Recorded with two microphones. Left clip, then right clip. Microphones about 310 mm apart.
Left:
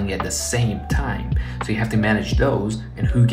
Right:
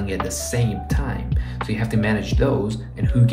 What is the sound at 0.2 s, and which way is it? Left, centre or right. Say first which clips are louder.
Speech: left 1 dB; centre.